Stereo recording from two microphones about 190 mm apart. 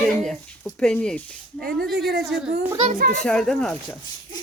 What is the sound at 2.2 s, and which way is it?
Speech, centre (ahead or behind).